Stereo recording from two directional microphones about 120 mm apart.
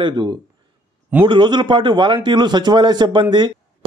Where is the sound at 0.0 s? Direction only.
35° right (ahead or behind).